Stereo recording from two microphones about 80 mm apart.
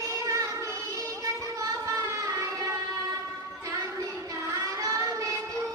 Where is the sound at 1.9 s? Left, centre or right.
Right.